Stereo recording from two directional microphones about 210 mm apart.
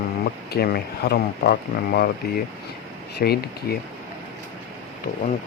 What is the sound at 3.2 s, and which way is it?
Speech, 50° left (ahead or behind).